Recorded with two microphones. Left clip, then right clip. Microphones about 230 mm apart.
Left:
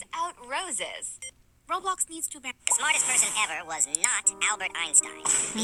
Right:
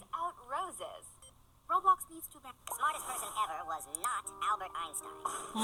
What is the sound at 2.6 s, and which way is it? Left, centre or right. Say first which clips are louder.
Speech: left 9 dB; left.